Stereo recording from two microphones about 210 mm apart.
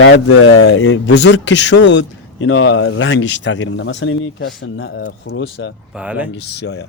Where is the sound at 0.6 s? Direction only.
65° left (ahead or behind).